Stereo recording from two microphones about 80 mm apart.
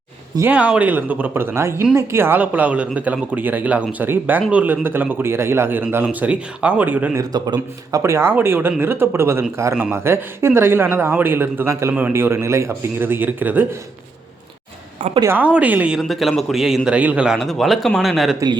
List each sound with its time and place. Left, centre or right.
0.4 s a man's voice: centre
7.2 s speech: right
8.0 s a man's voice: right
8.3 s a man's voice: right
13.0 s a man's voice: right
15.4 s a woman's voice: centre
16.0 s speech: centre
16.9 s a woman's voice: centre
17.2 s speech: centre